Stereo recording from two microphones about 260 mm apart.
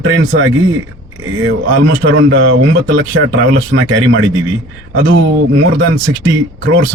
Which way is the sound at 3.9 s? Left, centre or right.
Right.